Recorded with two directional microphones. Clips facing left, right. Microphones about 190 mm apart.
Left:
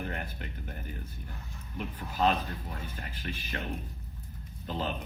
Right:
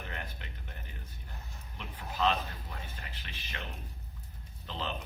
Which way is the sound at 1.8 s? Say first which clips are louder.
Left 3 dB; 45° left (ahead or behind).